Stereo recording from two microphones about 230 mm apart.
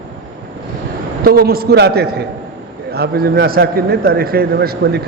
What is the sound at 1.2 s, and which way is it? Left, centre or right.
A man's voice, right.